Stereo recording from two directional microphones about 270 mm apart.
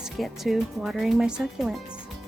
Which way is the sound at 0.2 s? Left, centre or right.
Centre.